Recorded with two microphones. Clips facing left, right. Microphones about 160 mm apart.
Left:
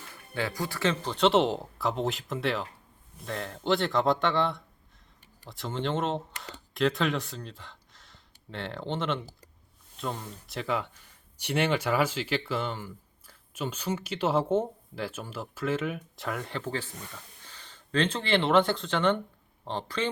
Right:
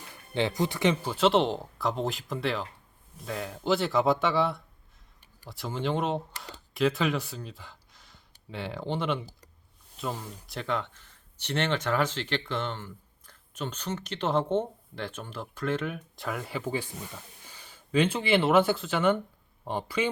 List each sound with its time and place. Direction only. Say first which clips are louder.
0.3 s speech: right 4 dB; 20° right (ahead or behind)
1.1 s speech: left 3 dB; centre (ahead or behind)